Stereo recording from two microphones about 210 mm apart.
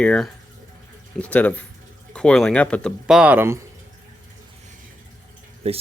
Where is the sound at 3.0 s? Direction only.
5° right (ahead or behind).